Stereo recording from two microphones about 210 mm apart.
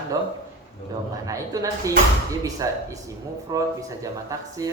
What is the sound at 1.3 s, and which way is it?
Speech, 15° right (ahead or behind).